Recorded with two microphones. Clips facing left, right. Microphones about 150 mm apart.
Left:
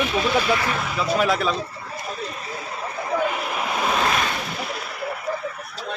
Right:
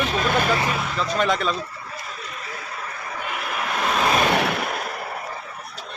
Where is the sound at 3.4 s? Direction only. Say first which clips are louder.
Left 1 dB; 15° left (ahead or behind).